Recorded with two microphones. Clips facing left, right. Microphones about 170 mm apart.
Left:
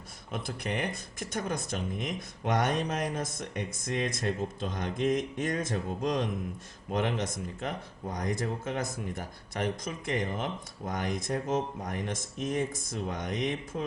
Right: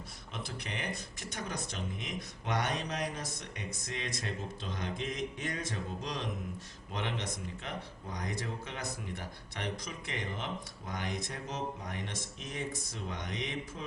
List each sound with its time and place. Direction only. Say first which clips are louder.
0.4 s speech: left 6 dB; 50° left (ahead or behind)